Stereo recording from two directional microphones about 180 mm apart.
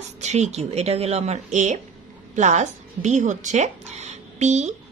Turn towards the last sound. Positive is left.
turn(degrees=-40)  # may be behind; listen again after turning